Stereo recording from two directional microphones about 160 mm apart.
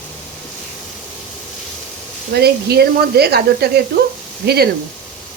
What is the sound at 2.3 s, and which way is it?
Speech, 85° right.